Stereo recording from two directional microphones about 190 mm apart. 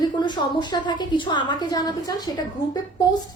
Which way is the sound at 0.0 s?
25° left (ahead or behind).